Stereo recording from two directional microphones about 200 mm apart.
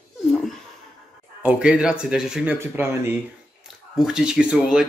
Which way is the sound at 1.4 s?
5° right (ahead or behind).